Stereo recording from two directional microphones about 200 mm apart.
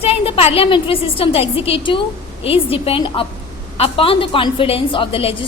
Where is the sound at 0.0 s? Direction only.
30° left (ahead or behind).